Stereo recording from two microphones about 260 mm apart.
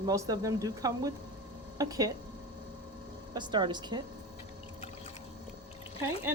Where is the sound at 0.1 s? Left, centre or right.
Centre.